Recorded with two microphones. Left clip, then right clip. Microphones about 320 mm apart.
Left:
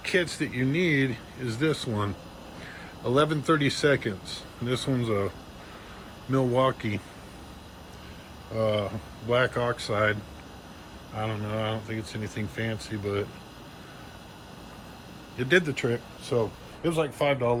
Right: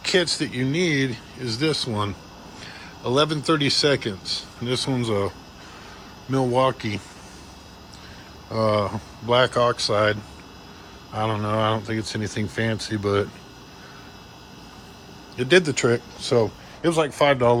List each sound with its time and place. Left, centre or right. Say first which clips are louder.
0.0 s speech: right 5 dB; centre
6.3 s speech: right 4 dB; centre
8.5 s speech: right 5 dB; centre
15.4 s speech: right 6 dB; centre